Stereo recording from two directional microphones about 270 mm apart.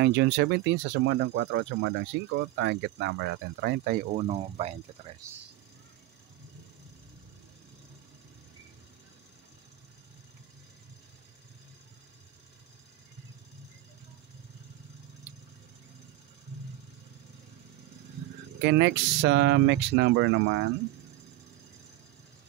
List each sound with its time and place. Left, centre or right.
0.0 s speech: right
18.6 s speech: right